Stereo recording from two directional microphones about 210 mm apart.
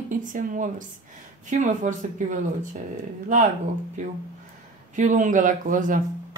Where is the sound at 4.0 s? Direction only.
35° right (ahead or behind).